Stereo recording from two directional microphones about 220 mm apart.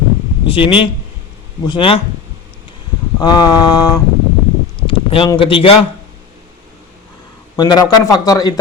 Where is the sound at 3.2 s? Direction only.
20° left (ahead or behind).